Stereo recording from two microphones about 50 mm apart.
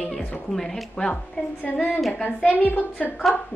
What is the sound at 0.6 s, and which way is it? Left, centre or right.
Speech, centre.